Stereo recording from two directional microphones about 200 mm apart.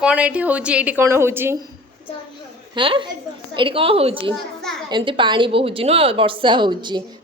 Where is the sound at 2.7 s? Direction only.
25° right (ahead or behind).